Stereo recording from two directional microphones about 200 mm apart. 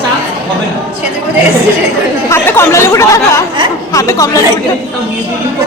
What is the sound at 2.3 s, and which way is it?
Speech, 15° left (ahead or behind).